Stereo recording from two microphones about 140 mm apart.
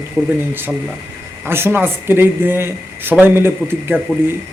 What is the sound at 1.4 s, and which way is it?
Speech, 15° right (ahead or behind).